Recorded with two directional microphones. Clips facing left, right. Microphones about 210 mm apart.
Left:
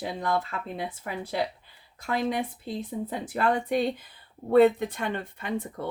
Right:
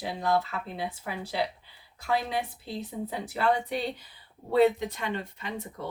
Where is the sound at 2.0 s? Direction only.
50° left (ahead or behind).